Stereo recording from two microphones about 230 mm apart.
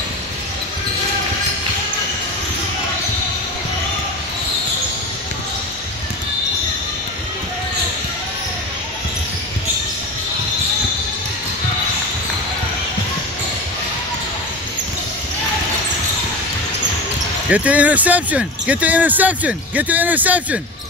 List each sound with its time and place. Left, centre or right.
17.5 s speech: centre